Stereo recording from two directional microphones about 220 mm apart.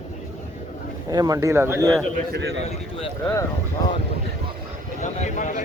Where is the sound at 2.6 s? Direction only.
25° left (ahead or behind).